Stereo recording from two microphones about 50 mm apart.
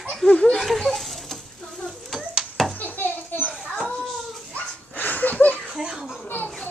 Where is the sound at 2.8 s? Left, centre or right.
Left.